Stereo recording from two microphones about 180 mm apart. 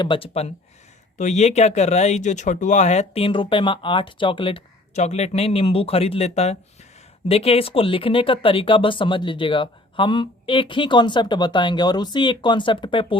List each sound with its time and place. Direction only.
0.0 s speech: 30° left (ahead or behind)